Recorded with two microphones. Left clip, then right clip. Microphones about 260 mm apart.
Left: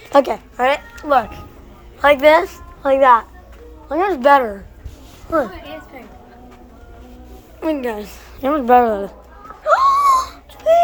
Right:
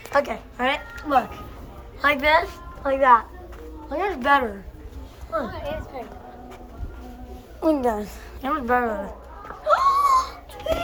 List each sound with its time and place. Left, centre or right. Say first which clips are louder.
0.1 s a woman's voice: left 8 dB; left
2.0 s a woman's voice: left 8 dB; left
7.6 s a woman's voice: even; centre; by 9.1 s left
9.6 s whimper: left 5 dB; centre